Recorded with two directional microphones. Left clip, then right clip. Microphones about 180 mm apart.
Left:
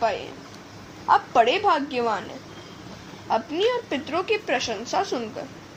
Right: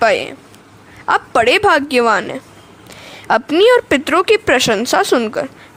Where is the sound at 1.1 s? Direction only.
40° right (ahead or behind); by 5.4 s 60° right (ahead or behind).